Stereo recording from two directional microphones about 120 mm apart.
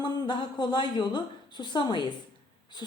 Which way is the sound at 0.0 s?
35° left (ahead or behind).